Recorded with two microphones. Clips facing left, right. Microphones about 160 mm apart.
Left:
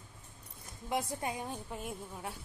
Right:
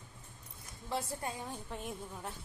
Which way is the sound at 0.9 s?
15° left (ahead or behind).